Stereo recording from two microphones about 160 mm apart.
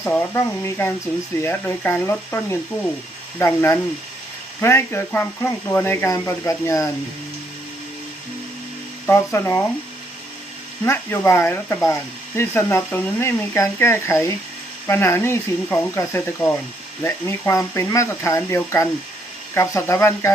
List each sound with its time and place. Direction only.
0.0 s speech: 15° left (ahead or behind)
9.0 s speech: 15° left (ahead or behind)
10.8 s speech: 15° left (ahead or behind)